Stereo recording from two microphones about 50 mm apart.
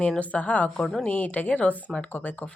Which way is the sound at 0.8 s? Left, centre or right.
Centre.